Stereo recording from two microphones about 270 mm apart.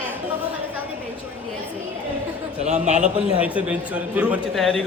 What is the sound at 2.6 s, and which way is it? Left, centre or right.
Speech, right.